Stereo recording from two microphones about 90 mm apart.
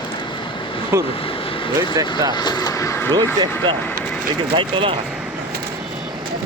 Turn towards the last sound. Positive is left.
turn(degrees=-75)  # may be behind; listen again after turning